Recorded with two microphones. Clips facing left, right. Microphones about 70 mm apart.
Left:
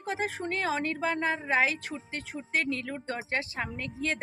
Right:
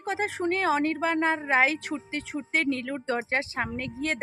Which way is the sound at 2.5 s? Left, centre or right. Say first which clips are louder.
Right 3 dB; right.